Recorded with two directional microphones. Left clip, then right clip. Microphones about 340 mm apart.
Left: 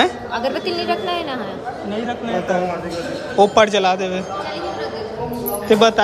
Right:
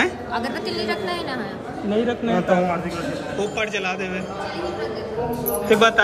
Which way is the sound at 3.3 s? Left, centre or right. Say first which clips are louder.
Left 13 dB; centre.